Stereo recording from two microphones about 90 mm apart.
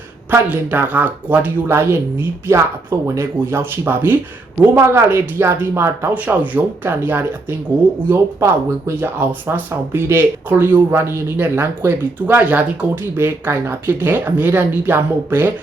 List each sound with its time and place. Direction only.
0.3 s speech: 20° right (ahead or behind)